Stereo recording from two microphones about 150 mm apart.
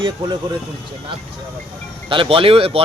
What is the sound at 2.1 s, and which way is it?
Speech, 35° right (ahead or behind).